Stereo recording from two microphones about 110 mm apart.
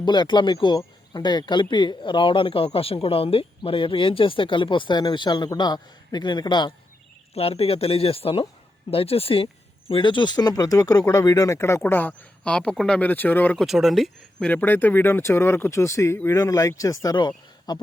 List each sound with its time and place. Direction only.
0.0 s speech: 40° left (ahead or behind)
7.3 s speech: 65° left (ahead or behind); by 13.6 s 15° left (ahead or behind)
13.6 s speech: centre (ahead or behind)
14.3 s speech: 10° left (ahead or behind); by 17.2 s 30° left (ahead or behind)
17.2 s speech: 45° left (ahead or behind)